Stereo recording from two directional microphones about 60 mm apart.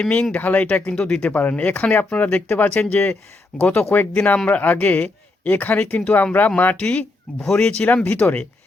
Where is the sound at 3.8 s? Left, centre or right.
Left.